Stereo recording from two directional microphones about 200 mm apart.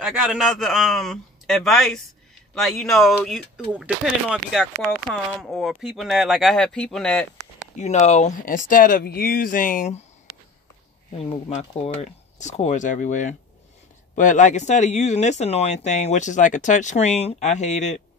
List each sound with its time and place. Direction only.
0.0 s speech: 5° right (ahead or behind)
7.7 s speech: 35° left (ahead or behind)
11.1 s speech: 30° left (ahead or behind)